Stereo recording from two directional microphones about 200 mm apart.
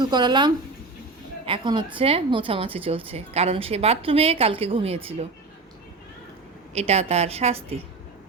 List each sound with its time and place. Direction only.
0.0 s a woman's voice: 20° right (ahead or behind)
6.7 s a woman's voice: 30° right (ahead or behind)